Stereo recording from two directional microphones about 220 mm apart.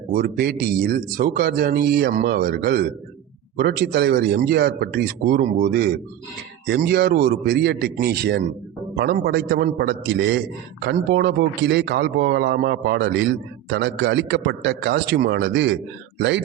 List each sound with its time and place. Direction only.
0.1 s a man's voice: 45° right (ahead or behind)